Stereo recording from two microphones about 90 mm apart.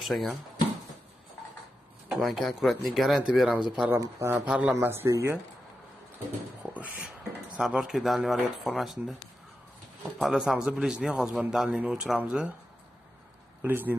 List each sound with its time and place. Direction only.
0.0 s speech: centre (ahead or behind)
2.0 s a man's voice: centre (ahead or behind)
3.9 s speech: 30° right (ahead or behind)
4.5 s a man's voice: 15° right (ahead or behind)
4.7 s speech: 30° right (ahead or behind)
6.1 s a sound: 15° right (ahead or behind)
7.5 s speech: 5° right (ahead or behind)
10.2 s a man's voice: 5° right (ahead or behind)
13.6 s speech: 20° right (ahead or behind)